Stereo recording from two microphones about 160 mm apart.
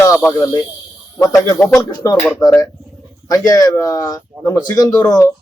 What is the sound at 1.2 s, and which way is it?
Speech, 20° left (ahead or behind).